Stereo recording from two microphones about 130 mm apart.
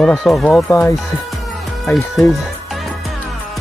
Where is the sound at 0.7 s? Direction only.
15° left (ahead or behind).